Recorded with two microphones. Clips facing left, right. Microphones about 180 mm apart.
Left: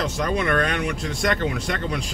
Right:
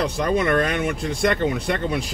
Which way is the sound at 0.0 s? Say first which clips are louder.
Right 3 dB; centre (ahead or behind).